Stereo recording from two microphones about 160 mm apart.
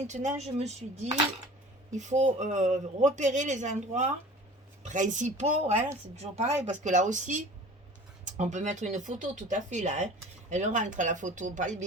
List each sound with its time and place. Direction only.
0.1 s speech: 45° right (ahead or behind)
2.0 s speech: 45° right (ahead or behind)